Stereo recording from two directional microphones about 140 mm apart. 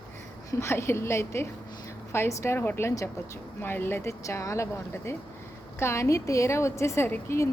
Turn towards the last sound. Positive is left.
turn(degrees=20)  # may be behind; listen again after turning